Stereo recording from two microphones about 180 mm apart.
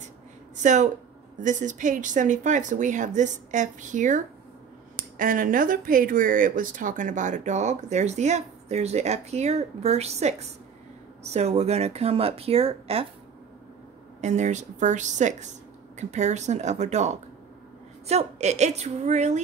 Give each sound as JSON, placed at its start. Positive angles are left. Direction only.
{"t": 0.6, "sound": "speech", "side_deg": -40}
{"t": 14.2, "sound": "speech", "side_deg": -40}